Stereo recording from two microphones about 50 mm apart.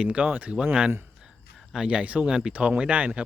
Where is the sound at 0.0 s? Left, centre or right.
Right.